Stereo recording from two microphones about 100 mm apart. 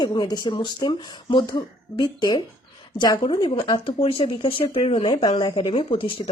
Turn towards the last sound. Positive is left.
turn(degrees=60)  # may be behind; listen again after turning